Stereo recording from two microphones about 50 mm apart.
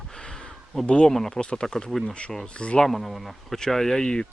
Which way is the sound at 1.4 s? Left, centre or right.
Centre.